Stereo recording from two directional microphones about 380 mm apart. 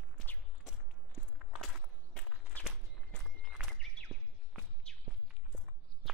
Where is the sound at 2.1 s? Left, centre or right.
Centre.